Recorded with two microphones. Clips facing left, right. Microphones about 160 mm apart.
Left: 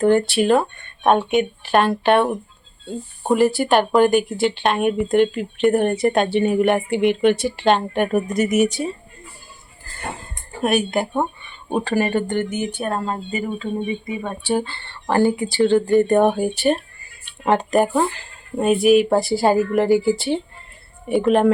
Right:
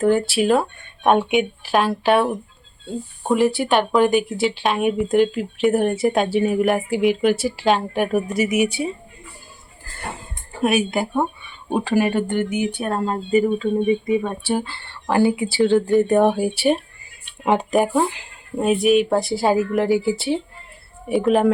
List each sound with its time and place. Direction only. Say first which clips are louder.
0.0 s speech: left 1 dB; 5° right (ahead or behind)
10.6 s speech: even; 5° right (ahead or behind)
14.2 s speech: left 1 dB; 5° right (ahead or behind)
17.5 s speech: left 1 dB; 5° right (ahead or behind)